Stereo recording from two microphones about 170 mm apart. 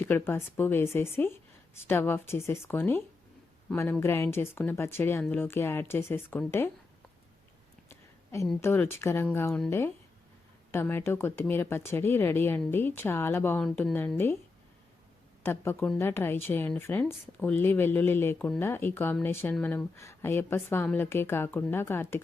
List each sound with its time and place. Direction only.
0.0 s speech: 15° left (ahead or behind)
4.0 s speech: 15° left (ahead or behind)
7.9 s a sound: 15° left (ahead or behind)
8.6 s speech: 15° left (ahead or behind)
15.4 s speech: 15° left (ahead or behind)
18.3 s speech: 5° left (ahead or behind)